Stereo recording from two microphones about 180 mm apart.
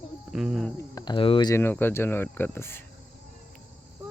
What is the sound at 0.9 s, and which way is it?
Speech, 25° left (ahead or behind).